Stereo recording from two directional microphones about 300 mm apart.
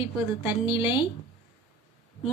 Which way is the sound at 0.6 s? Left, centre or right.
Centre.